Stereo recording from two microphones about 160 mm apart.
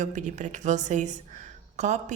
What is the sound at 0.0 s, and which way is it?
A woman's voice, 45° right (ahead or behind).